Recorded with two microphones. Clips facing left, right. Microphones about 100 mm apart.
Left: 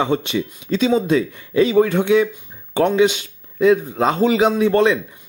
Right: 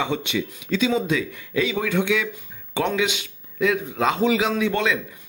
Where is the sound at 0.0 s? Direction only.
40° left (ahead or behind).